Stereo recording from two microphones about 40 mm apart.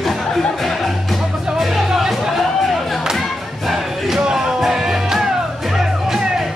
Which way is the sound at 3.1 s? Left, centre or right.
Centre.